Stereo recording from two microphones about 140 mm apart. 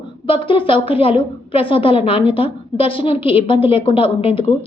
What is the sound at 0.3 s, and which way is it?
A woman's voice, 40° left (ahead or behind).